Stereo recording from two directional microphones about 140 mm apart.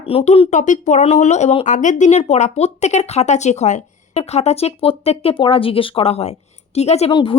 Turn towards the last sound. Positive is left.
turn(degrees=35)  # may be behind; listen again after turning